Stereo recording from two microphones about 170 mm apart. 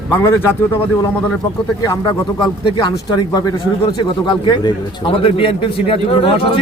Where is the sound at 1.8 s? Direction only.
25° left (ahead or behind).